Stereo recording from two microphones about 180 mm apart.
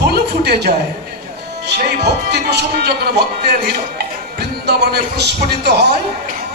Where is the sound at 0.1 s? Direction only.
65° right (ahead or behind).